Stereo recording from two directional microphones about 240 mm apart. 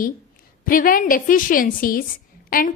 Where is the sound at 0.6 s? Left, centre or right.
Left.